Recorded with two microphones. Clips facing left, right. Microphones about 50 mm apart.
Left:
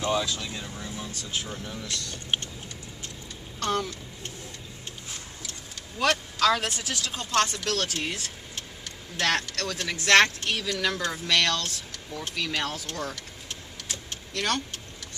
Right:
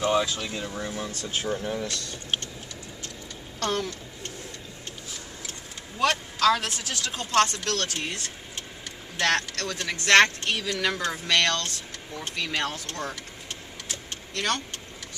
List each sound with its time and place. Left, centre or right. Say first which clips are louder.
0.0 s speech: right 3 dB; centre
0.5 s speech: right 5 dB; right
5.9 s a man's voice: even; centre
12.7 s vehicle: even; centre